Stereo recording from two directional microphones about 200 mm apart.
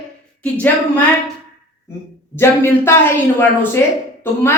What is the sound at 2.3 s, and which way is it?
Speech, 15° left (ahead or behind).